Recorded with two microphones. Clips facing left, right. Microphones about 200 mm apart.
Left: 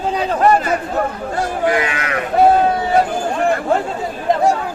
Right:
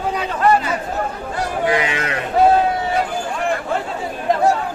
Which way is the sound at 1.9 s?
30° right (ahead or behind).